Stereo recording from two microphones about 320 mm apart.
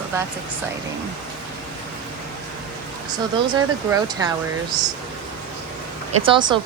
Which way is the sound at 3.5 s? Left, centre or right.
Centre.